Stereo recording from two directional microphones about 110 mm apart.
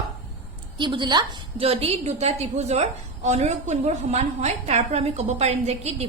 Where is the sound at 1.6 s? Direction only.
65° right (ahead or behind).